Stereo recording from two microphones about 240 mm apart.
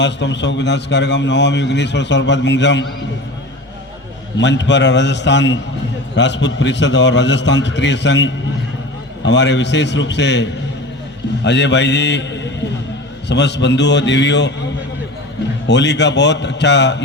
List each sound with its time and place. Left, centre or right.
0.0 s a man's voice: left
4.4 s a man's voice: left